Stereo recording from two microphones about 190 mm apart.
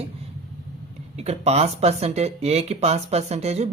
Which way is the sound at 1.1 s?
35° right (ahead or behind).